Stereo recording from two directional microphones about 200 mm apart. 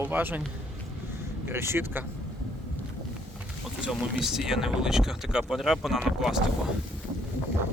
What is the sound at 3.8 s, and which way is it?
Speech, centre (ahead or behind).